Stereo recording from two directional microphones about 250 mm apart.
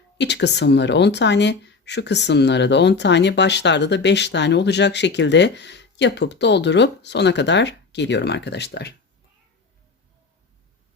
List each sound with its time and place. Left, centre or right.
0.2 s speech: left